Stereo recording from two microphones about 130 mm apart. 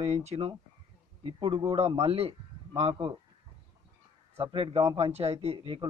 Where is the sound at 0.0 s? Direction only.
55° right (ahead or behind).